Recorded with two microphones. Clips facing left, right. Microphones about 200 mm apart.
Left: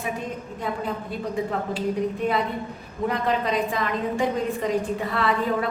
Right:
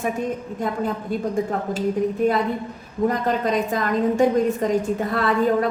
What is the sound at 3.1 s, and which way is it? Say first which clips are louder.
A woman's voice: left 1 dB; 45° right (ahead or behind).